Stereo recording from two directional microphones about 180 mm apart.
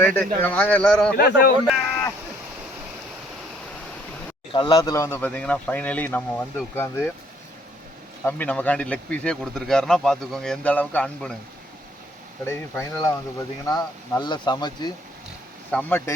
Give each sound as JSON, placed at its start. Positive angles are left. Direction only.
{"t": 0.0, "sound": "a man's voice", "side_deg": 10}
{"t": 1.1, "sound": "speech", "side_deg": 55}
{"t": 4.5, "sound": "speech", "side_deg": 25}
{"t": 8.2, "sound": "speech", "side_deg": 10}
{"t": 12.5, "sound": "speech", "side_deg": 15}
{"t": 15.7, "sound": "speech", "side_deg": 10}